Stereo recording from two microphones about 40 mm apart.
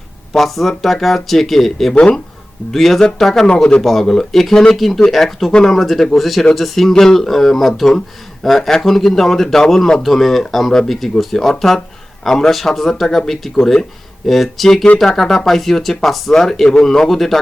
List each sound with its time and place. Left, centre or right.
0.3 s speech: centre
3.4 s a man's voice: left
3.8 s speech: centre
5.5 s a man's voice: centre
5.7 s speech: centre